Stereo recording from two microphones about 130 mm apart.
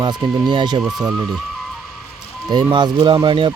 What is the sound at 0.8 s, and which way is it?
Speech, 5° right (ahead or behind).